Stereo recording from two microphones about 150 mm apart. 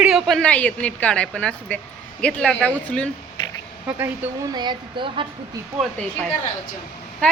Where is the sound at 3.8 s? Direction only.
15° right (ahead or behind).